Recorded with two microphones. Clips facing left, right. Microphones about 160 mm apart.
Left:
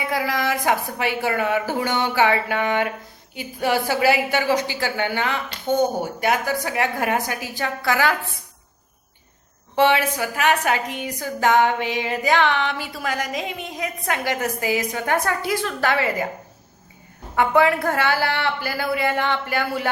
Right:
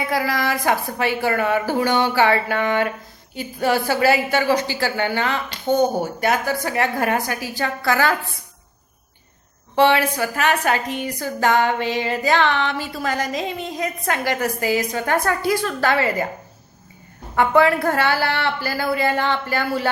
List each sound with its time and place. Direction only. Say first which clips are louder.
0.2 s a woman's voice: right 1 dB; 20° left (ahead or behind)
9.7 s a woman's voice: right 2 dB; 15° left (ahead or behind)
17.3 s a woman's voice: right 2 dB; 15° left (ahead or behind)